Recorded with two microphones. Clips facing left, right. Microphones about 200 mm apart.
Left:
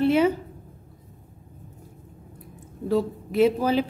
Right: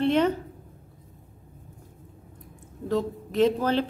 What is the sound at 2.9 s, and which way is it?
Speech, 10° left (ahead or behind).